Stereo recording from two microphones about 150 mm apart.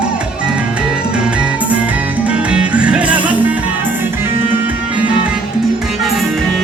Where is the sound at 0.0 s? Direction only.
5° right (ahead or behind).